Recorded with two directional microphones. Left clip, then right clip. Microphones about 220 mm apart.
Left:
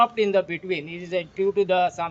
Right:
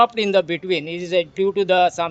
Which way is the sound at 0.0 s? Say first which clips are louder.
Right 3 dB; 50° right (ahead or behind).